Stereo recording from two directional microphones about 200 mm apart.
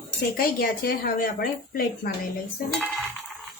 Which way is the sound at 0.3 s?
45° left (ahead or behind).